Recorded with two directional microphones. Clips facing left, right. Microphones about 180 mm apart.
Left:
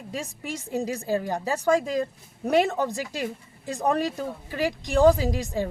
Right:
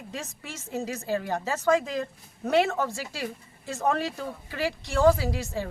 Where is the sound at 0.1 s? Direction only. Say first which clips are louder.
Left 7 dB; 15° left (ahead or behind).